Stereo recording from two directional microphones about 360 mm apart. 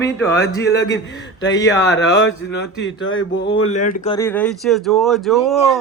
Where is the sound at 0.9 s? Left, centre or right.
Left.